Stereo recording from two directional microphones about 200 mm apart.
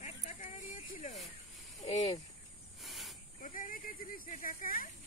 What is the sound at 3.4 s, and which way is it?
Speech, 45° left (ahead or behind).